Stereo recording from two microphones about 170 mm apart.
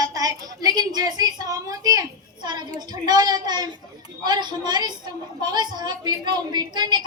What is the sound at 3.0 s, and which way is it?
A woman's voice, 25° right (ahead or behind).